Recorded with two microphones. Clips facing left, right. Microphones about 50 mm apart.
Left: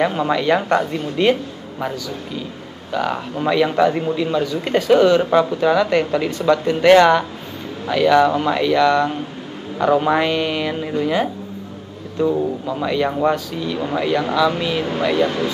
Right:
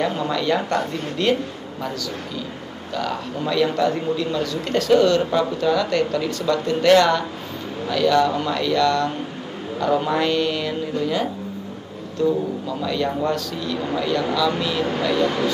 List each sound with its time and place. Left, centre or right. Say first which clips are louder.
0.0 s a man's voice: left 4 dB; left